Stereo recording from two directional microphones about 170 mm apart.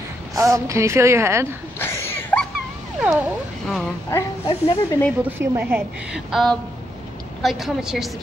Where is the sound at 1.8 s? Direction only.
15° left (ahead or behind).